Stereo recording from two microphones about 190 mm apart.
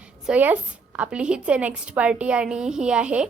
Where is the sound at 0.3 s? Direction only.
10° right (ahead or behind).